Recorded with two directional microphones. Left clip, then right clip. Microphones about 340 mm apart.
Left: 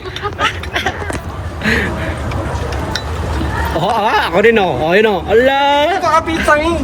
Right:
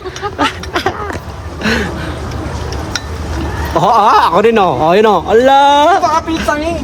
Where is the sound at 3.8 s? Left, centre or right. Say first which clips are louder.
Right 7 dB; centre.